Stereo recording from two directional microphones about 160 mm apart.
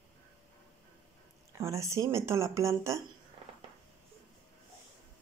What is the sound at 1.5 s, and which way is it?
Speech, 20° right (ahead or behind).